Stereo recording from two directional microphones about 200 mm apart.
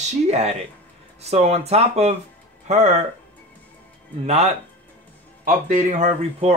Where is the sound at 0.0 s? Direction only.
30° right (ahead or behind).